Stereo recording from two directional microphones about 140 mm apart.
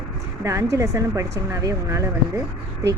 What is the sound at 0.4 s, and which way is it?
Speech, 25° right (ahead or behind).